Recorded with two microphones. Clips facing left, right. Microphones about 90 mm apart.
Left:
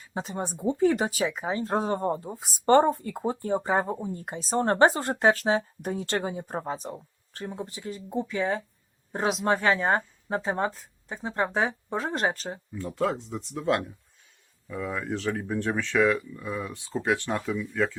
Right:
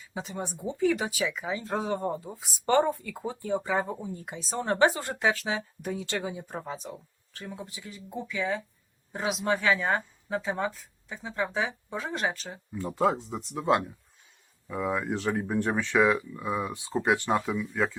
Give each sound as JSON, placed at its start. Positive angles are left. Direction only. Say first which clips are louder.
{"t": 0.0, "sound": "speech", "louder": "left 3 dB", "side_deg": 45}
{"t": 12.7, "sound": "speech", "louder": "right 2 dB", "side_deg": -10}